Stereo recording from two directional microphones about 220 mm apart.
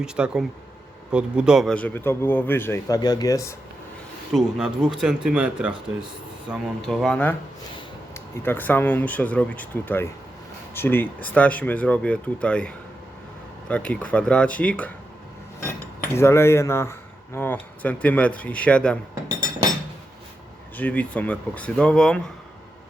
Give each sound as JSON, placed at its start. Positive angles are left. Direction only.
{"t": 0.0, "sound": "speech", "side_deg": -5}
{"t": 4.4, "sound": "speech", "side_deg": -5}
{"t": 16.1, "sound": "speech", "side_deg": 10}
{"t": 20.7, "sound": "speech", "side_deg": 5}